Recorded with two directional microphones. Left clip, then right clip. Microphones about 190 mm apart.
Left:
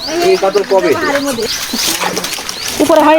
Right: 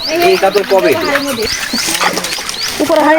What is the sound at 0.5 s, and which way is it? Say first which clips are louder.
Speech: right 1 dB; 5° right (ahead or behind).